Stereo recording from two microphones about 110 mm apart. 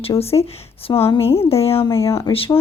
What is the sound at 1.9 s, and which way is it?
Speech, 25° left (ahead or behind).